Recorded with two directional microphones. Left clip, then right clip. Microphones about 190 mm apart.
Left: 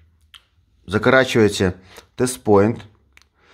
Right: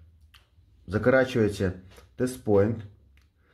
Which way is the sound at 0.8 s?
35° left (ahead or behind).